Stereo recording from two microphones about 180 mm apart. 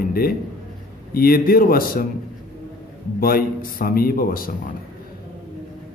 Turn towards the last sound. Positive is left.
turn(degrees=55)  # may be behind; listen again after turning